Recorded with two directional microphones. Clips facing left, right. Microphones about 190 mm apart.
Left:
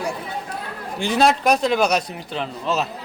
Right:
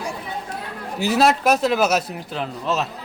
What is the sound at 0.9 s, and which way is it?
A man's voice, 5° right (ahead or behind).